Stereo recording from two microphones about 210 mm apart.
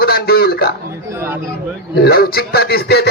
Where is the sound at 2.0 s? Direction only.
50° left (ahead or behind).